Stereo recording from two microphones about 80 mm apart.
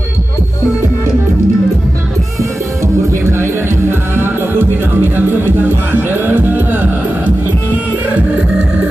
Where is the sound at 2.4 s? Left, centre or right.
Right.